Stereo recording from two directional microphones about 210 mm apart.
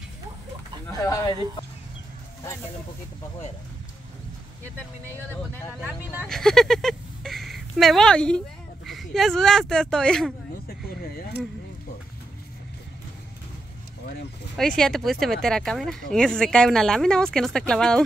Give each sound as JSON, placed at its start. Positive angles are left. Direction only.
{"t": 0.9, "sound": "speech", "side_deg": 15}
{"t": 5.9, "sound": "speech", "side_deg": 0}
{"t": 10.7, "sound": "speech", "side_deg": 45}
{"t": 14.8, "sound": "speech", "side_deg": 0}